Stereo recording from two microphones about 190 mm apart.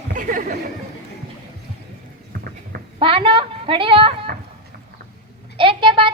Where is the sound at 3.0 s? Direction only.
30° right (ahead or behind).